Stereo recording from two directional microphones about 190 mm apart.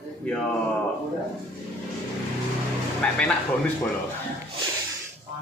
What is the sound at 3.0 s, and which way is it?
Speech, 5° left (ahead or behind).